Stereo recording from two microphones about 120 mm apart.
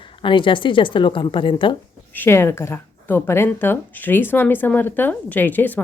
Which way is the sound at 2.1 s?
15° left (ahead or behind).